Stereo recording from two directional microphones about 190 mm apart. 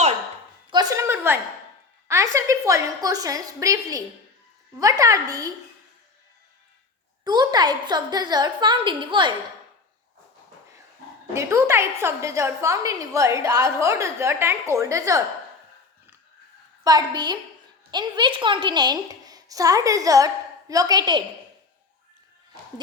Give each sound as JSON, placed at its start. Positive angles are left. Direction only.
{"t": 0.7, "sound": "a sound", "side_deg": -20}
{"t": 2.0, "sound": "a woman's voice", "side_deg": -15}
{"t": 7.3, "sound": "a woman's voice", "side_deg": -20}
{"t": 11.3, "sound": "a woman's voice", "side_deg": -15}
{"t": 16.8, "sound": "a woman's voice", "side_deg": -20}